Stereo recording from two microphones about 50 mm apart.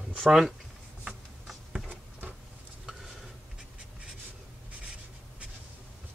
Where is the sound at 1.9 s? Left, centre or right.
Right.